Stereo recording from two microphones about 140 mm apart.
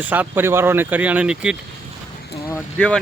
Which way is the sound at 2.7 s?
5° left (ahead or behind).